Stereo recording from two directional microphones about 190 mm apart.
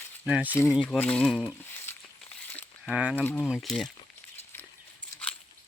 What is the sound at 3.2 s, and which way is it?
Speech, 10° left (ahead or behind).